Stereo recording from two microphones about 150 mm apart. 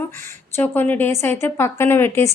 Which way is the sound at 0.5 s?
15° left (ahead or behind).